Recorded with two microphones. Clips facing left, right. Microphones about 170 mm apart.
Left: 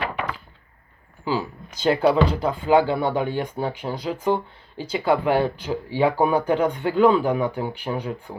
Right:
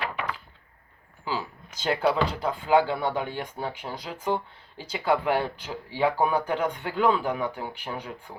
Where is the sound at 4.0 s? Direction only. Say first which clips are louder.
Left 7 dB; 30° left (ahead or behind).